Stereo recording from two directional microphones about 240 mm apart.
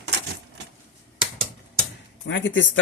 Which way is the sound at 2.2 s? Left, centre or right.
Left.